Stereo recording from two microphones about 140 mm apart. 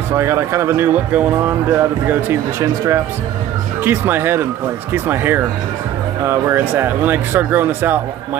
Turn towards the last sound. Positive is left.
turn(degrees=-15)  # may be behind; listen again after turning